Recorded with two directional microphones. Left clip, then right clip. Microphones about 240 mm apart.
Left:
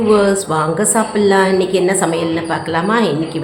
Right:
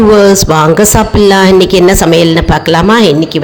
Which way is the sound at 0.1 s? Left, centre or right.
Right.